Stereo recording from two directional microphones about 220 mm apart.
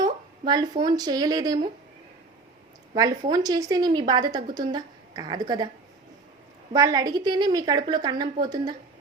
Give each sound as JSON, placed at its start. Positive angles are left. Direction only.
{"t": 0.0, "sound": "a sound", "side_deg": -20}
{"t": 0.9, "sound": "a woman's voice", "side_deg": -20}
{"t": 2.9, "sound": "a woman's voice", "side_deg": -20}
{"t": 6.7, "sound": "a woman's voice", "side_deg": -15}